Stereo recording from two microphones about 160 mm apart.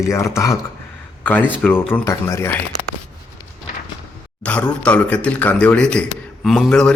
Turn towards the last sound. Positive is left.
turn(degrees=5)  # may be behind; listen again after turning